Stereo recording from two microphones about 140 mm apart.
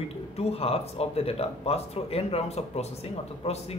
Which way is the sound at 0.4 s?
45° left (ahead or behind).